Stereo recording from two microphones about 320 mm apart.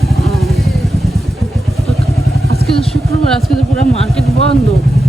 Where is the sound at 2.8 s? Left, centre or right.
Centre.